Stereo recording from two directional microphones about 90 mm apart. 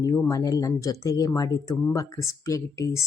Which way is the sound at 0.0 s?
40° left (ahead or behind).